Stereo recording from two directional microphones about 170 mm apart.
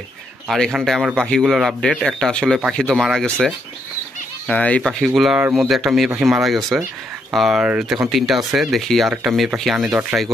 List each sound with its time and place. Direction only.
0.5 s speech: centre (ahead or behind)
5.4 s speech: 10° right (ahead or behind)